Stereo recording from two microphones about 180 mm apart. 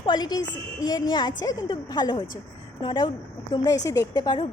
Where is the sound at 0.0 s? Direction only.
25° left (ahead or behind).